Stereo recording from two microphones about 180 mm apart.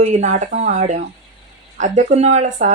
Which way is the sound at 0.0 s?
40° right (ahead or behind).